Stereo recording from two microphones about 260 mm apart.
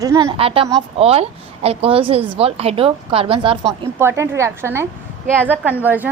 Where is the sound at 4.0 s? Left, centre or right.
Centre.